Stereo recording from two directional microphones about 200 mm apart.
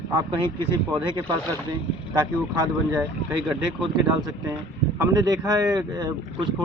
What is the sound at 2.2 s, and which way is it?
Speech, 15° right (ahead or behind).